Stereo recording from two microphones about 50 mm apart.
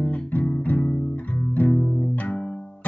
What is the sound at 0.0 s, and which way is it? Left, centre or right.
Music, left.